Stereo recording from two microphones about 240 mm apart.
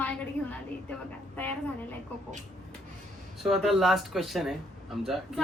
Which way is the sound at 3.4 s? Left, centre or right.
Centre.